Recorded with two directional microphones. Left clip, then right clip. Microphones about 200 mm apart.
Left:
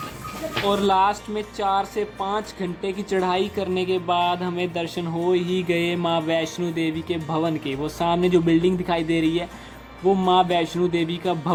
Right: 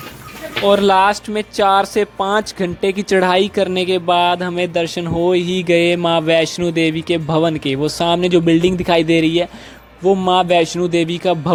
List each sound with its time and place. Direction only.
0.6 s speech: 40° right (ahead or behind)